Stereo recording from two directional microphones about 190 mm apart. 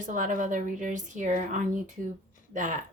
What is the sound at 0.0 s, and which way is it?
Speech, 45° right (ahead or behind).